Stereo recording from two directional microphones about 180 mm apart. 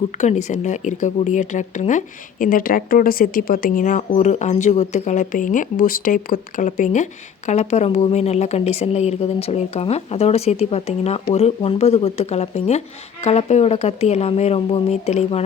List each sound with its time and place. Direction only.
0.2 s speech: 40° left (ahead or behind)